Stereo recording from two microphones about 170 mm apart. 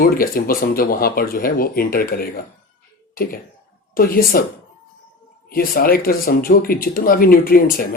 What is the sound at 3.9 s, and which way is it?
Speech, 60° left (ahead or behind).